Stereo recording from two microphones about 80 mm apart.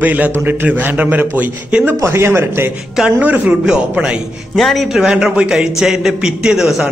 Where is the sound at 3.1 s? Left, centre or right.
Centre.